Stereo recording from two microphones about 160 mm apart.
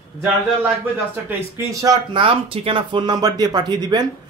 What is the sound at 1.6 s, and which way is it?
Speech, 20° right (ahead or behind).